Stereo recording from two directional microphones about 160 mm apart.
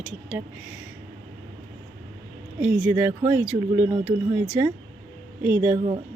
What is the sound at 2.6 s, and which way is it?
A woman's voice, 10° right (ahead or behind).